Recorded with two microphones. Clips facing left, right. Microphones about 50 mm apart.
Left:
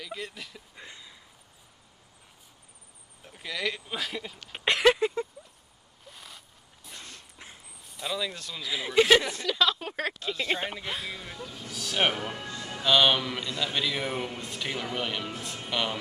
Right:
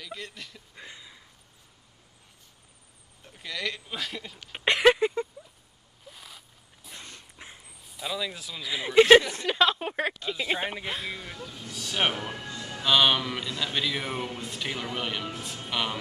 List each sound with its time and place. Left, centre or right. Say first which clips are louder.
0.0 s speech: left 2 dB; centre
3.3 s speech: left 1 dB; centre
6.0 s dog: even; centre
9.3 s speech: right 2 dB; right
10.0 s speech: left 2 dB; centre